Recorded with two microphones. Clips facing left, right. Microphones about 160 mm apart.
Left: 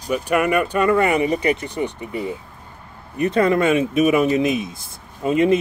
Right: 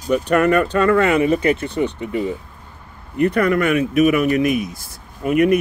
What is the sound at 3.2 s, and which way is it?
Speech, 25° left (ahead or behind).